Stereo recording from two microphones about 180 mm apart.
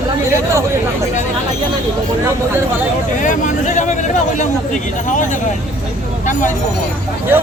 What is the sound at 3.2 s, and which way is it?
Speech, 45° left (ahead or behind).